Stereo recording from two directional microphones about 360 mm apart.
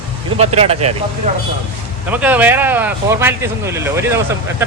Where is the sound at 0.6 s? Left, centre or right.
Centre.